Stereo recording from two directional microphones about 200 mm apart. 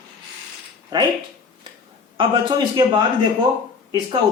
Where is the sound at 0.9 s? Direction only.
20° right (ahead or behind).